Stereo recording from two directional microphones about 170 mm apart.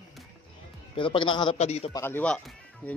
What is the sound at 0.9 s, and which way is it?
Speech, 30° left (ahead or behind).